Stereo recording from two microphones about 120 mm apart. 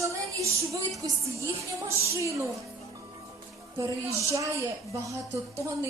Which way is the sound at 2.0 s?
25° right (ahead or behind).